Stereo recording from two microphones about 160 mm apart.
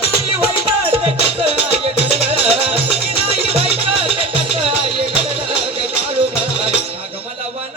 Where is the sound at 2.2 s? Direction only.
35° right (ahead or behind).